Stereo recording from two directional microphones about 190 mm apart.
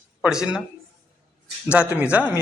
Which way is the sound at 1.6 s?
5° right (ahead or behind).